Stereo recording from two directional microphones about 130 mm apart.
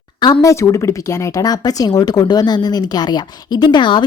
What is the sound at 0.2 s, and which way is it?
A woman's voice, 30° left (ahead or behind).